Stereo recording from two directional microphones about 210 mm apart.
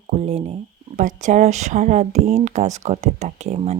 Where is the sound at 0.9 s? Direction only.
35° right (ahead or behind).